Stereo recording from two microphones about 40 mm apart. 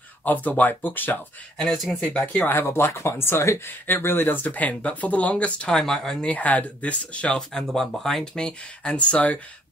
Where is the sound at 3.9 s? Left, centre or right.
Left.